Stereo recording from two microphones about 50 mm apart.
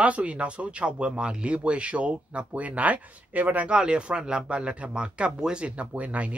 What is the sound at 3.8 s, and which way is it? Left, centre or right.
Speech, centre.